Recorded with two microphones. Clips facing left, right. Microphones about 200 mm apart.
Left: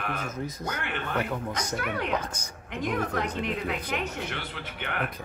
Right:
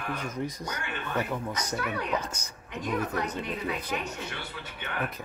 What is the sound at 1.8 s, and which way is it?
Speech, 65° left (ahead or behind).